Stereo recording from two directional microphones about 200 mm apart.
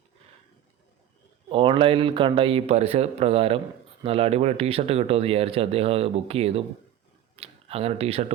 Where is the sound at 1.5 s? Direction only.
25° right (ahead or behind).